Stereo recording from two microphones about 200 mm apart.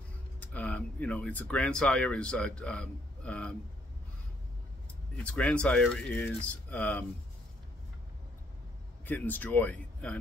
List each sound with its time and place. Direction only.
0.4 s speech: 5° left (ahead or behind)
5.1 s speech: 5° left (ahead or behind)
9.0 s speech: 10° left (ahead or behind)